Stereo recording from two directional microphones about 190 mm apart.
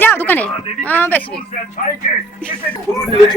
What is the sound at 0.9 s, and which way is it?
Speech, 10° left (ahead or behind).